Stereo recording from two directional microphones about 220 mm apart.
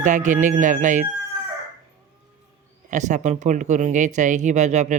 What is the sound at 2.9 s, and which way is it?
Speech, 35° right (ahead or behind).